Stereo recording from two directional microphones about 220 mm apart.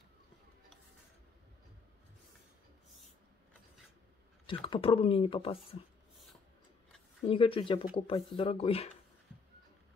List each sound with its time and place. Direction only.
4.5 s speech: 25° left (ahead or behind)
7.2 s speech: 25° left (ahead or behind)